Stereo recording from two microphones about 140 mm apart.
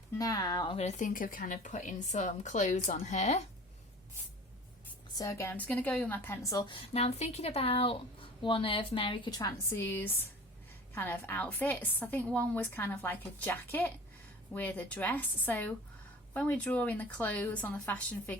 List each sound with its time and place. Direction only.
0.2 s speech: 25° left (ahead or behind)
0.8 s speech: 60° left (ahead or behind)
5.1 s a woman's voice: 20° left (ahead or behind)
9.6 s a woman's voice: 15° left (ahead or behind)